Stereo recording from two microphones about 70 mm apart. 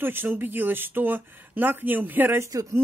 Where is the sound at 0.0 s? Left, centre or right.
Right.